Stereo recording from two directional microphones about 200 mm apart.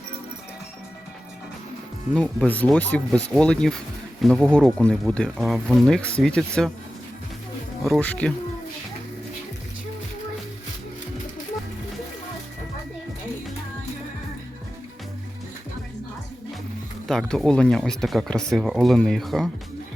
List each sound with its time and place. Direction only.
2.1 s speech: 5° left (ahead or behind)
7.9 s speech: 5° left (ahead or behind)
17.1 s speech: centre (ahead or behind)